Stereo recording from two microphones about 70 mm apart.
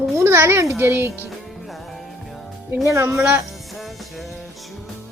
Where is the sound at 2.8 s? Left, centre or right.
Right.